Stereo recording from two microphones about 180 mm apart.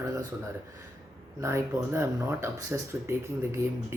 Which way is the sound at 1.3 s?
15° right (ahead or behind).